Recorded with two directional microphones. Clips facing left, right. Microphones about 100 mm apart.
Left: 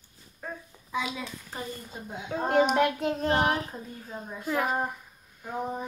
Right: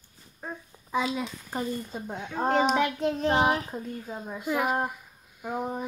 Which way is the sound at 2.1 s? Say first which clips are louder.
Right 2 dB; 10° left (ahead or behind).